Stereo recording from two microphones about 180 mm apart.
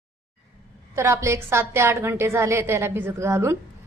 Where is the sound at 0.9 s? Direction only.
15° right (ahead or behind).